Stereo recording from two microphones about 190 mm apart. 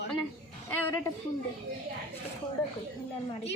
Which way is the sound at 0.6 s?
15° left (ahead or behind).